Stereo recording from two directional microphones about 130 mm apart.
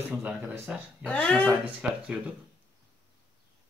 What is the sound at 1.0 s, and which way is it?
Speech, 10° left (ahead or behind).